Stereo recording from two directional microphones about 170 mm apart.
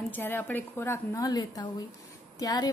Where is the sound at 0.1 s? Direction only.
10° left (ahead or behind).